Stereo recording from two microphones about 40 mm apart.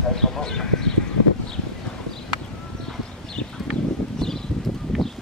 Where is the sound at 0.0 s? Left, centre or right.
Centre.